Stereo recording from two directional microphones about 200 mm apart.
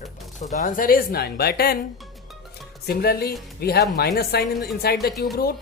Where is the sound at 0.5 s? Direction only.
40° left (ahead or behind).